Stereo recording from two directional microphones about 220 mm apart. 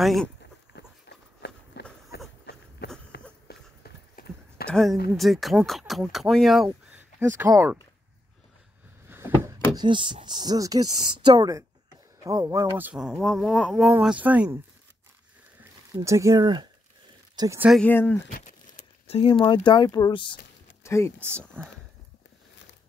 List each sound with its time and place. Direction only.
0.0 s speech: centre (ahead or behind)
0.7 s walk: 50° left (ahead or behind)
2.1 s a sound: 50° left (ahead or behind)
4.6 s speech: centre (ahead or behind)
9.1 s speech: 10° right (ahead or behind)
15.6 s a woman's voice: 15° right (ahead or behind)
17.6 s speech: 5° left (ahead or behind)
18.3 s speech: 35° left (ahead or behind); by 21.1 s 10° left (ahead or behind)
21.5 s speech: 10° right (ahead or behind)